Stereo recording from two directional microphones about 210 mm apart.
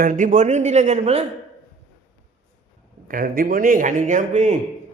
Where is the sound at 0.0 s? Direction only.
40° right (ahead or behind).